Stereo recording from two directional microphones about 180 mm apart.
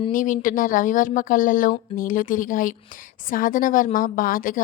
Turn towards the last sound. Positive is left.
turn(degrees=50)  # may be behind; listen again after turning